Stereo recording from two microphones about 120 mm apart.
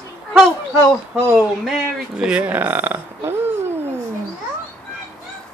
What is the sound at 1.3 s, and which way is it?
Speech, 5° right (ahead or behind).